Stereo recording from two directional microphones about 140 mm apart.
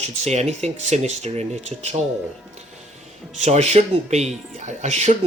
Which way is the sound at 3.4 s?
55° right (ahead or behind).